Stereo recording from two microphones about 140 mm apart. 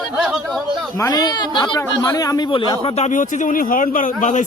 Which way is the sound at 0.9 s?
25° left (ahead or behind).